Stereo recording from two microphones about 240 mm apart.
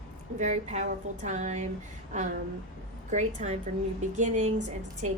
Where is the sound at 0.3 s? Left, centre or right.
Right.